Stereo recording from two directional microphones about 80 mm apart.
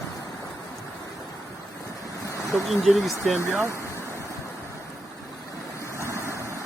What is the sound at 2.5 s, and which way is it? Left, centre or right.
Speech, centre.